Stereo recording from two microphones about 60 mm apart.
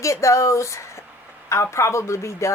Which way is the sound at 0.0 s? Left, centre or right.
Left.